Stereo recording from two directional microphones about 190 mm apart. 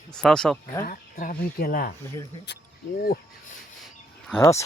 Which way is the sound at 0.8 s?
45° left (ahead or behind).